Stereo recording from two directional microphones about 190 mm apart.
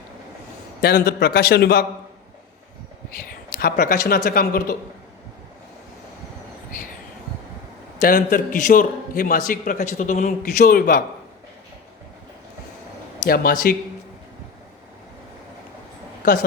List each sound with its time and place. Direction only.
0.8 s a man's voice: 55° left (ahead or behind)
3.5 s a man's voice: 55° left (ahead or behind)
7.9 s a man's voice: 50° left (ahead or behind)
13.2 s a man's voice: 50° left (ahead or behind)
16.2 s a man's voice: 45° left (ahead or behind)